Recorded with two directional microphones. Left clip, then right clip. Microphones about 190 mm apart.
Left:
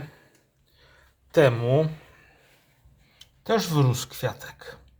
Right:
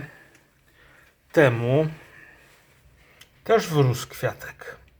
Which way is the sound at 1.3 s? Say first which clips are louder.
Right 1 dB; centre (ahead or behind).